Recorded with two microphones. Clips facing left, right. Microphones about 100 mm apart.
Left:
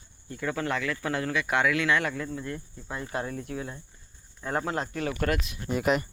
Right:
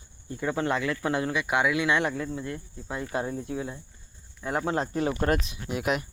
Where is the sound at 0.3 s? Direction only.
25° right (ahead or behind).